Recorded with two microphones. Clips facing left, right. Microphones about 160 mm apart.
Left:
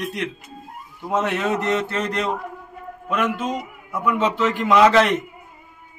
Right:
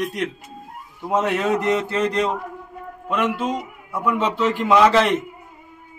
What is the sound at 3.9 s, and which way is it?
Speech, 5° right (ahead or behind).